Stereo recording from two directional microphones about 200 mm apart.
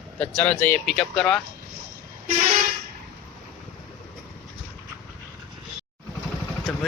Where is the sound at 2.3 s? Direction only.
40° right (ahead or behind).